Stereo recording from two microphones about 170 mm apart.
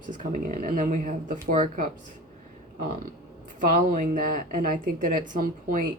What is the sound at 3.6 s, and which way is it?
A woman's voice, 50° right (ahead or behind).